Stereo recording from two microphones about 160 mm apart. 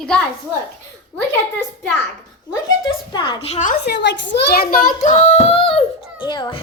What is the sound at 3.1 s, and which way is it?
Speech, 30° left (ahead or behind).